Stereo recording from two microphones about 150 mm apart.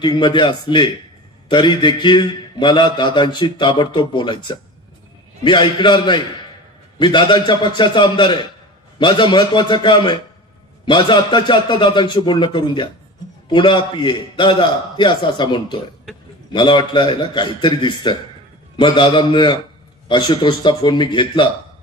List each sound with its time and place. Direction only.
0.0 s a man's voice: 30° left (ahead or behind)